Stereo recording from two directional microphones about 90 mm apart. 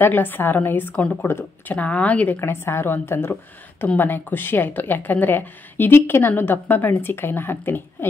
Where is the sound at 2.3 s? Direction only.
25° left (ahead or behind).